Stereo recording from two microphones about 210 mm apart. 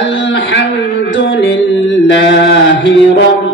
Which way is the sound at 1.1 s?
60° left (ahead or behind).